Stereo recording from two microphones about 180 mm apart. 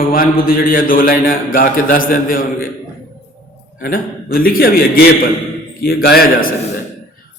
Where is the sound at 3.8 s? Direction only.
55° left (ahead or behind).